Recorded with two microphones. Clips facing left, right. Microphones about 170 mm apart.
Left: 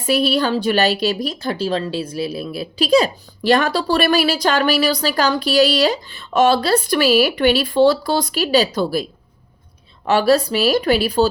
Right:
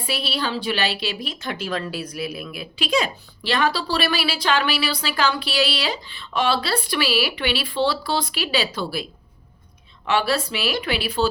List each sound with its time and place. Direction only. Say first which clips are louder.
0.0 s a woman's voice: left 9 dB; 45° left (ahead or behind)
10.1 s speech: left 7 dB; 40° left (ahead or behind)